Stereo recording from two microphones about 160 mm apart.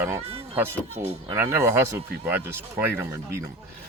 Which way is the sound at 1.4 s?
15° right (ahead or behind).